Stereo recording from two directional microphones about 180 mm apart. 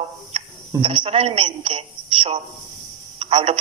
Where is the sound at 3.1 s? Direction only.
30° right (ahead or behind).